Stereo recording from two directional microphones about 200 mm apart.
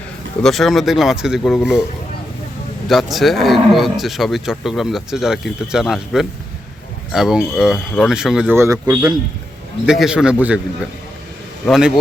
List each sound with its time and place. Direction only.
0.4 s speech: centre (ahead or behind)
2.8 s speech: centre (ahead or behind)